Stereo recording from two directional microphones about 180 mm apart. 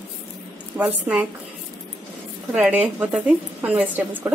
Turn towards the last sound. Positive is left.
turn(degrees=-10)  # may be behind; listen again after turning